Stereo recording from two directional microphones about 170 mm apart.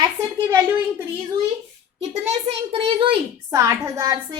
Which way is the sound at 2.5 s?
35° right (ahead or behind).